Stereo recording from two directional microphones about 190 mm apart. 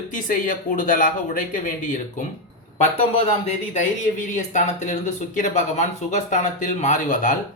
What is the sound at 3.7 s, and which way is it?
Speech, 40° left (ahead or behind).